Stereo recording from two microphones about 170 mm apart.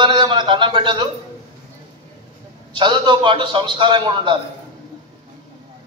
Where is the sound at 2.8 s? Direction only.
25° right (ahead or behind).